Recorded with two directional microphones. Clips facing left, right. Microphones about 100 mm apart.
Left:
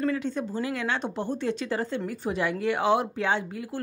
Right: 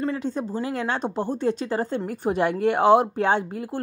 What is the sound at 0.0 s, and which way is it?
A woman's voice, 35° right (ahead or behind).